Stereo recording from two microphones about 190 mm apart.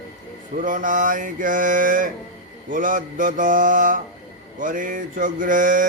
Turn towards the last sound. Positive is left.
turn(degrees=-45)  # may be behind; listen again after turning